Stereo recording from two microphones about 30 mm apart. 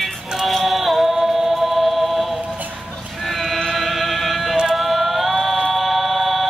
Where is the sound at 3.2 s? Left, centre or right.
Centre.